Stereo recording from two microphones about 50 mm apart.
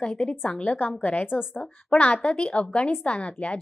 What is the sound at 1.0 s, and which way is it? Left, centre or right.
A woman's voice, left.